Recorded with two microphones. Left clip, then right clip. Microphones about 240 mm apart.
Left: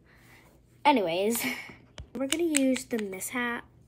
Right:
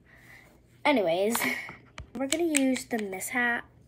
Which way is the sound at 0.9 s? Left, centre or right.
Centre.